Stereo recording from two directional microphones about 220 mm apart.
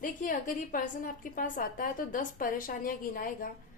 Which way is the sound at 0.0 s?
40° left (ahead or behind).